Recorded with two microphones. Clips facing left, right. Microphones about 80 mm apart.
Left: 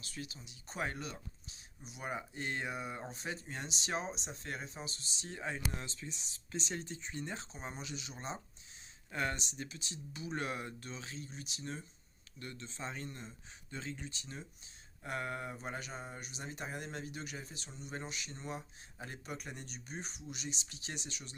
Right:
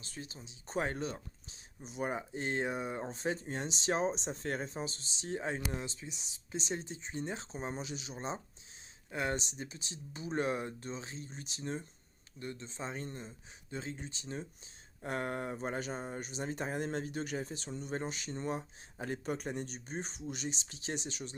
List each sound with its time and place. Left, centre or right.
0.0 s speech: right
5.2 s speech: right
12.4 s speech: right